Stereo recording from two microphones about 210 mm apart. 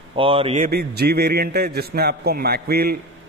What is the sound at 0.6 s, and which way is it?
A man's voice, 50° right (ahead or behind).